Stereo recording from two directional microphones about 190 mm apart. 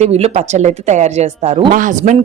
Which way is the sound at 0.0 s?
35° right (ahead or behind).